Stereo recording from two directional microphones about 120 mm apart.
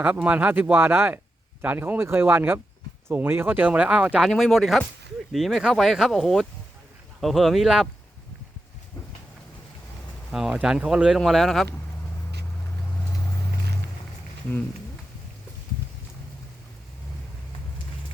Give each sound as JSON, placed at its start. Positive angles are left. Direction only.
{"t": 0.0, "sound": "speech", "side_deg": -10}
{"t": 4.3, "sound": "speech", "side_deg": 0}
{"t": 10.3, "sound": "speech", "side_deg": -5}